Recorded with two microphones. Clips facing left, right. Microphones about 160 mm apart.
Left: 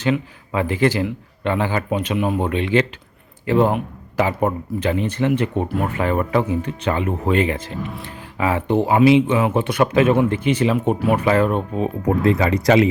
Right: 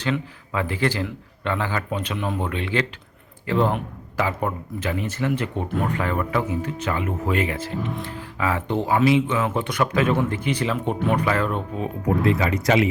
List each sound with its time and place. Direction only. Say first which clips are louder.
0.0 s speech: left 5 dB; 15° left (ahead or behind)
12.0 s speech: left 3 dB; 35° left (ahead or behind)